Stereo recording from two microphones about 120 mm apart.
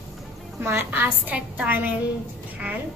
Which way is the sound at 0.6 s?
20° right (ahead or behind).